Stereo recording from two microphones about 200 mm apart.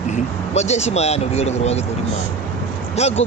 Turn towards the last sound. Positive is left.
turn(degrees=30)  # may be behind; listen again after turning